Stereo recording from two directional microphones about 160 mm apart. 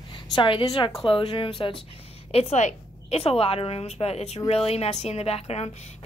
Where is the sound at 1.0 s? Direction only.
35° left (ahead or behind).